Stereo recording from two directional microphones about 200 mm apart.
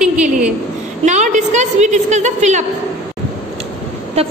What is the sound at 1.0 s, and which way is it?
A woman's voice, 35° right (ahead or behind).